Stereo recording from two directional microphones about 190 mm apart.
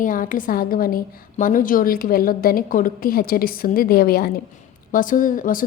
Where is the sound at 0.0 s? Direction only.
45° left (ahead or behind).